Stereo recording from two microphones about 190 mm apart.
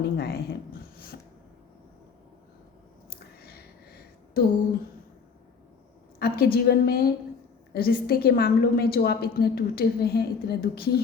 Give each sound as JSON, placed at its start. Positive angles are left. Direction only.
{"t": 0.0, "sound": "a woman's voice", "side_deg": 55}
{"t": 6.1, "sound": "a woman's voice", "side_deg": 55}